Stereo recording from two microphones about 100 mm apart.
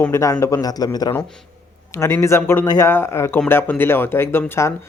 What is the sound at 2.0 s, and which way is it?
Speech, 25° left (ahead or behind).